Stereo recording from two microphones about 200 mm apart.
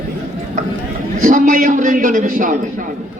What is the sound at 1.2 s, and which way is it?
A man's voice, 40° right (ahead or behind).